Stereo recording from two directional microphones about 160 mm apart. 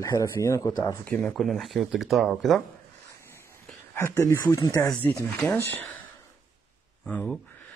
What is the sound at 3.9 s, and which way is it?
Speech, 15° left (ahead or behind).